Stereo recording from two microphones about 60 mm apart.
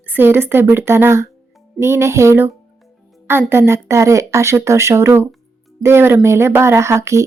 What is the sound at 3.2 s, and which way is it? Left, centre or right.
Speech, right.